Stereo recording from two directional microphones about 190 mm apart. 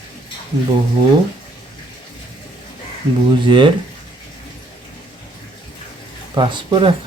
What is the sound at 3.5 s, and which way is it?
Speech, 25° right (ahead or behind).